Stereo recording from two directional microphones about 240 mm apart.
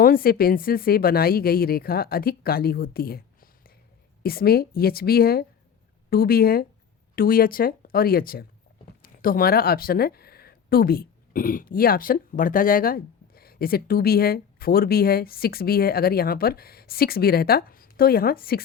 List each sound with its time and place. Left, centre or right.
0.0 s speech: left